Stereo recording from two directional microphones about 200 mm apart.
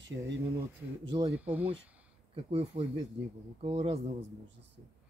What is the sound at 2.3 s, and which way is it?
Speech, 25° right (ahead or behind).